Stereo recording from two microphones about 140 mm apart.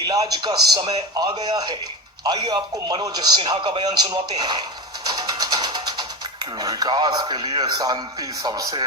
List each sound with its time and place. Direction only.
0.0 s a man's voice: 25° right (ahead or behind)